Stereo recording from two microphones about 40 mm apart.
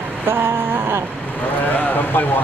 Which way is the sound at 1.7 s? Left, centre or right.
Left.